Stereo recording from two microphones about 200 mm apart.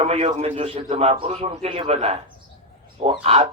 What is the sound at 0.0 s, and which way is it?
A man's voice, 30° right (ahead or behind).